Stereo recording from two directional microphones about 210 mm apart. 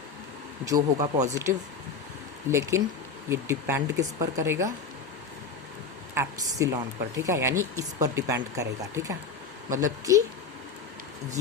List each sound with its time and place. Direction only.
0.6 s speech: 15° right (ahead or behind)
6.1 s speech: 15° right (ahead or behind)